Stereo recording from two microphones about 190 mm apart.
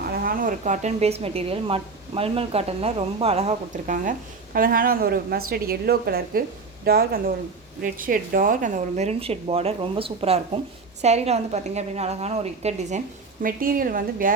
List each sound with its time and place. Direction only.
0.1 s a woman's voice: 50° right (ahead or behind); by 13.0 s 35° right (ahead or behind)
13.4 s a woman's voice: 50° right (ahead or behind)